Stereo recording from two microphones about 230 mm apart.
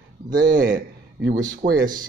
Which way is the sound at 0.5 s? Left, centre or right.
Right.